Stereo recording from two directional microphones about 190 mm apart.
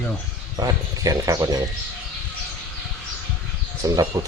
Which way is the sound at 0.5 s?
20° right (ahead or behind).